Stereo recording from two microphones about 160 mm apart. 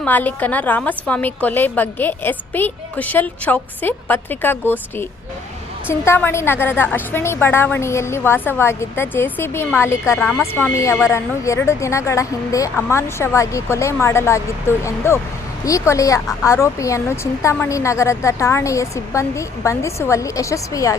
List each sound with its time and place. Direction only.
0.0 s a woman's voice: 10° left (ahead or behind)